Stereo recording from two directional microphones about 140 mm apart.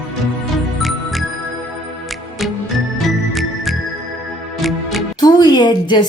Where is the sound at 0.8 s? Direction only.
Centre (ahead or behind).